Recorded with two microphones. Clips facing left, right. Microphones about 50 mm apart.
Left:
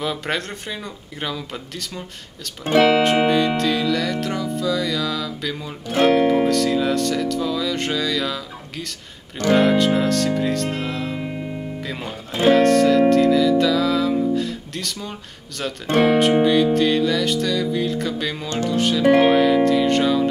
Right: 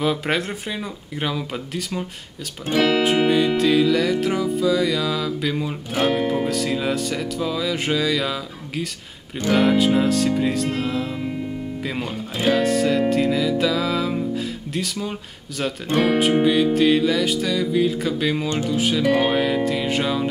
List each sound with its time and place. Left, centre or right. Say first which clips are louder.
0.0 s music: right 3 dB; centre
2.6 s speech: left 4 dB; left
3.3 s music: right 1 dB; centre
12.4 s music: left 5 dB; centre
14.3 s speech: left 2 dB; centre
16.2 s music: left 2 dB; centre